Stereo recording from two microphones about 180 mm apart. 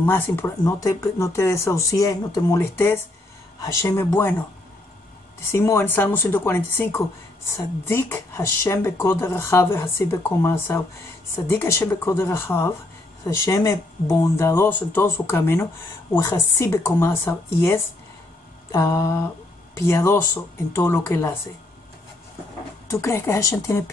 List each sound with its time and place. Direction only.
0.0 s speech: 10° left (ahead or behind)
5.4 s speech: 15° left (ahead or behind)
22.8 s speech: 15° left (ahead or behind)